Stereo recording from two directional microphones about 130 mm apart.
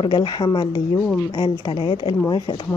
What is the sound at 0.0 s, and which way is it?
A woman's voice, 35° left (ahead or behind).